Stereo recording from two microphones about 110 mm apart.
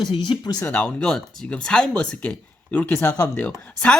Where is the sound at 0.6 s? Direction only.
15° left (ahead or behind).